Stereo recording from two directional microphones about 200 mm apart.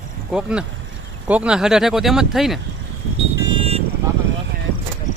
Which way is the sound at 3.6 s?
30° right (ahead or behind).